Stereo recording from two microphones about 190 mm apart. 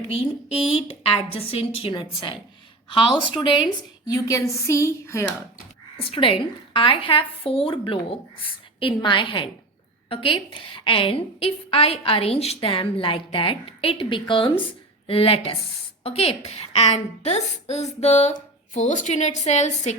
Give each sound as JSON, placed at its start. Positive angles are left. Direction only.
{"t": 0.1, "sound": "a woman's voice", "side_deg": 30}
{"t": 6.1, "sound": "a woman's voice", "side_deg": 30}